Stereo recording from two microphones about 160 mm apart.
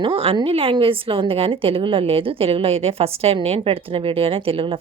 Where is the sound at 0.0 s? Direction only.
35° right (ahead or behind).